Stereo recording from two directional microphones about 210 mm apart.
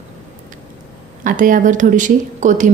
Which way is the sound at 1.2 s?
40° right (ahead or behind).